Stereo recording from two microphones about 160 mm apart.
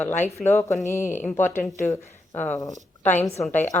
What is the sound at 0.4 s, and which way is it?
Speech, 15° left (ahead or behind).